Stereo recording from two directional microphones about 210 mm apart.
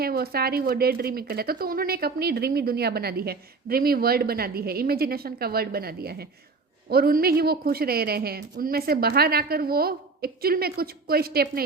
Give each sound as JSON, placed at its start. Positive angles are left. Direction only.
{"t": 0.0, "sound": "speech", "side_deg": -45}